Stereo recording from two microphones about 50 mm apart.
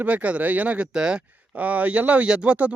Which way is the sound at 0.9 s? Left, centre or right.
Centre.